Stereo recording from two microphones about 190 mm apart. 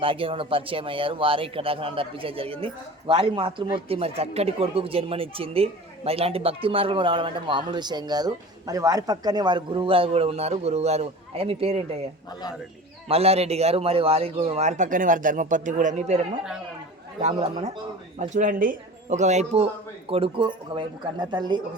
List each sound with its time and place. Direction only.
0.0 s a man's voice: 30° right (ahead or behind)
13.1 s a man's voice: 30° right (ahead or behind)